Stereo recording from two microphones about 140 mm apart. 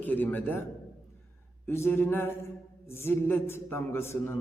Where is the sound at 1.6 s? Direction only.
15° left (ahead or behind).